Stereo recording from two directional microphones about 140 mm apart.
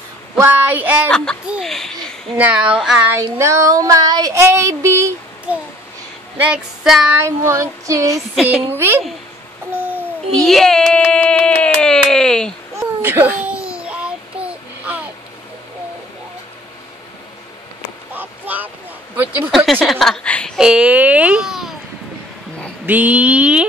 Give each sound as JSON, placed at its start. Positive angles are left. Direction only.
{"t": 0.4, "sound": "speech", "side_deg": -15}
{"t": 1.1, "sound": "a child's voice", "side_deg": 5}
{"t": 2.3, "sound": "female singing", "side_deg": -10}
{"t": 3.3, "sound": "child singing", "side_deg": -20}
{"t": 6.3, "sound": "female singing", "side_deg": -10}
{"t": 7.2, "sound": "child singing", "side_deg": -20}
{"t": 10.3, "sound": "a child's voice", "side_deg": 5}
{"t": 12.7, "sound": "a sound", "side_deg": -15}
{"t": 13.5, "sound": "child singing", "side_deg": -10}
{"t": 18.1, "sound": "a sound", "side_deg": -15}
{"t": 19.5, "sound": "a child's voice", "side_deg": 0}
{"t": 20.5, "sound": "a child's voice", "side_deg": -5}
{"t": 22.8, "sound": "female singing", "side_deg": -10}